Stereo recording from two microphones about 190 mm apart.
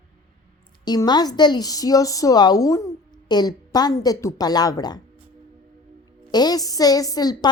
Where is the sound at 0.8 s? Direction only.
20° left (ahead or behind).